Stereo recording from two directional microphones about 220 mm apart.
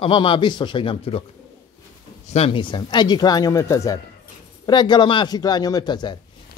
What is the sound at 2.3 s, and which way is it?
A man's voice, 25° left (ahead or behind).